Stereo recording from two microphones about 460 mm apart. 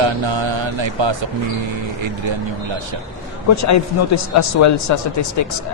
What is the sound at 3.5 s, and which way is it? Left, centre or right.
Speech, left.